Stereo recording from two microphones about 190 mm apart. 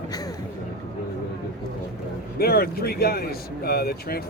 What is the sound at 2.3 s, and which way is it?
Speech, 55° left (ahead or behind).